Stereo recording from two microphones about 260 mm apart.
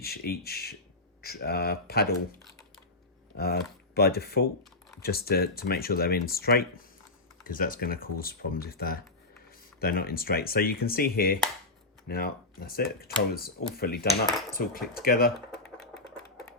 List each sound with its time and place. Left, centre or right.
0.0 s speech: left
3.3 s speech: left